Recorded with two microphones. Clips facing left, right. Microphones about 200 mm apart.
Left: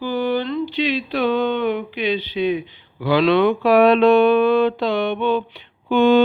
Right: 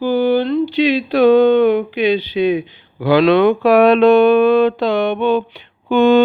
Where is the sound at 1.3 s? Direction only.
40° right (ahead or behind).